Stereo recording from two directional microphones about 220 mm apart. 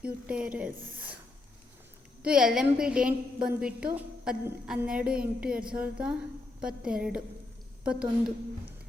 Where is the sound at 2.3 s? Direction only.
5° right (ahead or behind).